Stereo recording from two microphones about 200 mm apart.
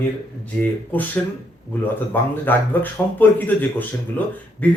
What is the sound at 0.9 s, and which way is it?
Speech, 10° left (ahead or behind).